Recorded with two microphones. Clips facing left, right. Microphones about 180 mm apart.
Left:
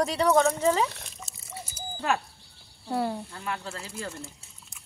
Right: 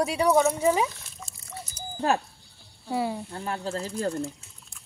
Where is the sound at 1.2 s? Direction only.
5° left (ahead or behind).